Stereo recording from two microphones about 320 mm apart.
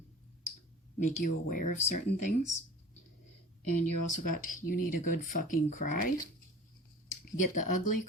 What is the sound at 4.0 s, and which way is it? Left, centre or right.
Speech, left.